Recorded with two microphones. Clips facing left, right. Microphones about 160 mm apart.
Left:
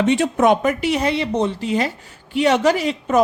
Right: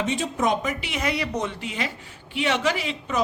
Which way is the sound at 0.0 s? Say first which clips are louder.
Left 8 dB; 70° left (ahead or behind).